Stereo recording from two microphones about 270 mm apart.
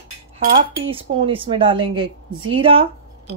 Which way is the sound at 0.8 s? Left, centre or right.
Centre.